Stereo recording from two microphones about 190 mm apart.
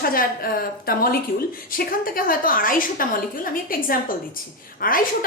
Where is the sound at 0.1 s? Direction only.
50° left (ahead or behind).